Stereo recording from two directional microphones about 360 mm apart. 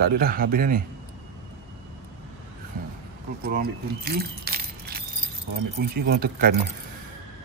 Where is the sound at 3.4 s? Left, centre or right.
Right.